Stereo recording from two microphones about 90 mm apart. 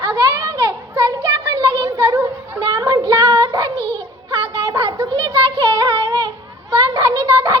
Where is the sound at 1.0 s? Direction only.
45° right (ahead or behind).